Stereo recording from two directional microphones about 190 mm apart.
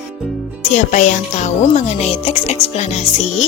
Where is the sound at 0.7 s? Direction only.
40° left (ahead or behind).